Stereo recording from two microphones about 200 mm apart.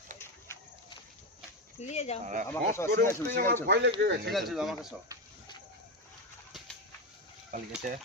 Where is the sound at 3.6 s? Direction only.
60° right (ahead or behind).